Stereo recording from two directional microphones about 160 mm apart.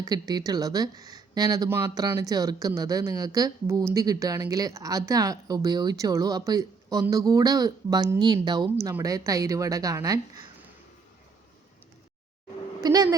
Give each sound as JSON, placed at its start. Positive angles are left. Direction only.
{"t": 0.0, "sound": "speech", "side_deg": -25}
{"t": 12.8, "sound": "speech", "side_deg": -25}